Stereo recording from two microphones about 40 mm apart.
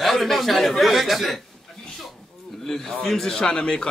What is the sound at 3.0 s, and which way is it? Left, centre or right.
Speech, centre.